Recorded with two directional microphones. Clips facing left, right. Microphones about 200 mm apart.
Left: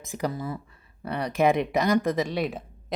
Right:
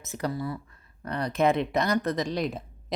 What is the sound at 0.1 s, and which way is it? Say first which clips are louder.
Speech: left 1 dB; 15° left (ahead or behind).